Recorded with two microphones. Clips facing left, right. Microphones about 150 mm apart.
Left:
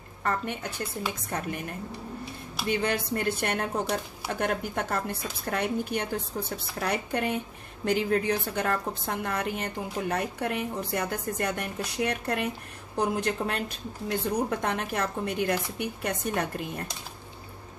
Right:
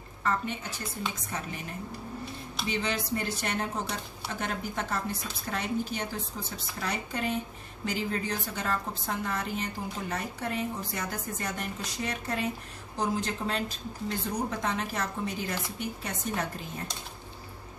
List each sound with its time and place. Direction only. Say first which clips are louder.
0.2 s a woman's voice: left 1 dB; 55° left (ahead or behind)
2.7 s a woman's voice: left 4 dB; 55° left (ahead or behind)